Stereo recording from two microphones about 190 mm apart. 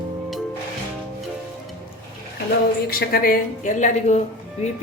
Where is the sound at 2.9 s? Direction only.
50° left (ahead or behind).